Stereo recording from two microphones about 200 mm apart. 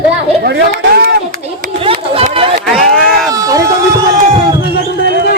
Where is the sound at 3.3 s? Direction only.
15° right (ahead or behind).